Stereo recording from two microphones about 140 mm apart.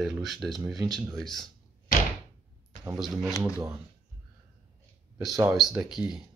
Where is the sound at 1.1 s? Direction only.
Centre (ahead or behind).